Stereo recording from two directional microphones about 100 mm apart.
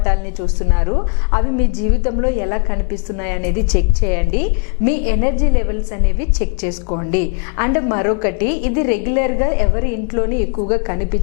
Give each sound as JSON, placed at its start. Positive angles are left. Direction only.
{"t": 0.7, "sound": "a woman's voice", "side_deg": 20}